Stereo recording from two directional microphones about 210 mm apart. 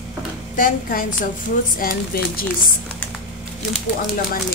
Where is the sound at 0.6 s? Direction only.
40° left (ahead or behind).